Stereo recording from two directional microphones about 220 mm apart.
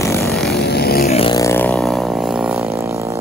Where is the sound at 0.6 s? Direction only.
45° left (ahead or behind).